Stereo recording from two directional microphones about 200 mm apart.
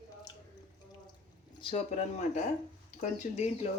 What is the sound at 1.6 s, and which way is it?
Speech, 30° left (ahead or behind).